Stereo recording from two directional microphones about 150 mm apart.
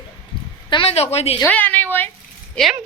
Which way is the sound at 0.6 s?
35° left (ahead or behind).